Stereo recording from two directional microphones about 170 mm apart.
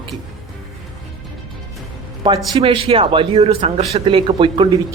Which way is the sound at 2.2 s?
25° right (ahead or behind).